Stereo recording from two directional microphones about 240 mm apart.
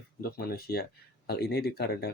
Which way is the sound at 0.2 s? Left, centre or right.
Left.